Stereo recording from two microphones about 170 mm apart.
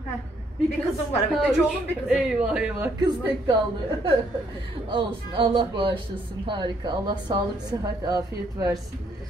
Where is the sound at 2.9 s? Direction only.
25° right (ahead or behind).